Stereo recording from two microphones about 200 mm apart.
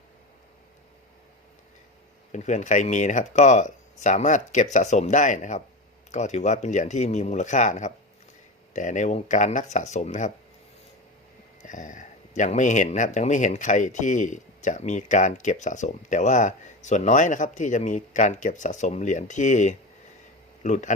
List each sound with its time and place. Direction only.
2.3 s speech: 35° left (ahead or behind)
11.6 s speech: 40° left (ahead or behind)